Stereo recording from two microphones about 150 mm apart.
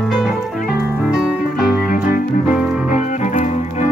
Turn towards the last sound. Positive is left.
turn(degrees=50)  # may be behind; listen again after turning